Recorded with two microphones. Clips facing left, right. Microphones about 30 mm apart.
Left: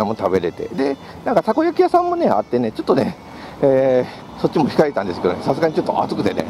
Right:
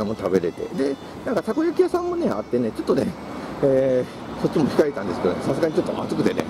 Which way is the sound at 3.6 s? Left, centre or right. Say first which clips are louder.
Left 4 dB; left.